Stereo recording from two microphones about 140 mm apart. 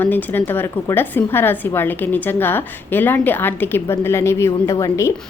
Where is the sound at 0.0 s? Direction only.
15° left (ahead or behind).